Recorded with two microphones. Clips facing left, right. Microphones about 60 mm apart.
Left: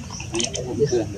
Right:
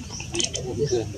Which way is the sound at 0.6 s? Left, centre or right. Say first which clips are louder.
Left 4 dB; left.